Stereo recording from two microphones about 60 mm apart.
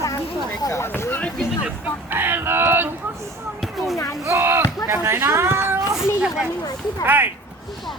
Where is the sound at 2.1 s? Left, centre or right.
Right.